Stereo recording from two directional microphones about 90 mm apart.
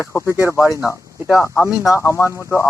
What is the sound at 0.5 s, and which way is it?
Speech, 35° left (ahead or behind).